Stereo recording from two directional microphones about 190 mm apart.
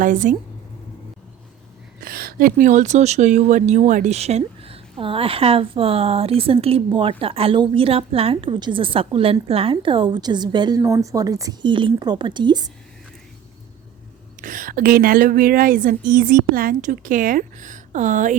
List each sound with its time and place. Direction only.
0.0 s a woman's voice: 45° right (ahead or behind)
2.0 s speech: 50° right (ahead or behind); by 12.7 s 25° right (ahead or behind)
14.4 s a woman's voice: 45° right (ahead or behind)